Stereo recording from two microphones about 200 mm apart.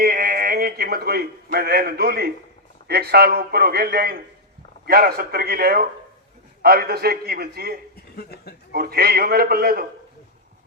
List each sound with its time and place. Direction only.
0.0 s a man's voice: 45° right (ahead or behind)
8.1 s speech: 50° left (ahead or behind)
8.7 s a man's voice: 50° right (ahead or behind)